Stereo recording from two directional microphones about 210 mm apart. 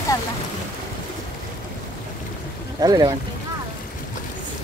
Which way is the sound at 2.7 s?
20° right (ahead or behind).